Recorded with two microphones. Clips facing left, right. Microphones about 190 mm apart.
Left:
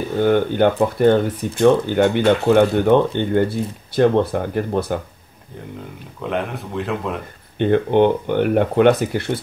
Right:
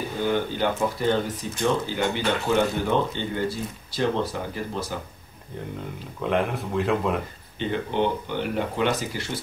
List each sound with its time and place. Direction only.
0.2 s speech: 60° left (ahead or behind)
6.2 s speech: centre (ahead or behind)
7.5 s speech: 55° left (ahead or behind)